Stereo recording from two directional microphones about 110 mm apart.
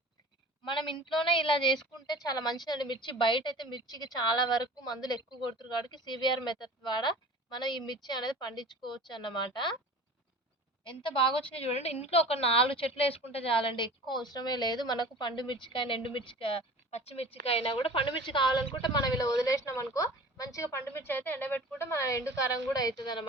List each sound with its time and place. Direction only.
0.6 s a woman's voice: 50° left (ahead or behind)
2.0 s a woman's voice: 35° left (ahead or behind)
11.1 s a woman's voice: 55° left (ahead or behind)